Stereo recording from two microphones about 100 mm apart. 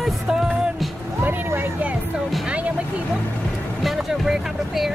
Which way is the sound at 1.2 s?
20° right (ahead or behind).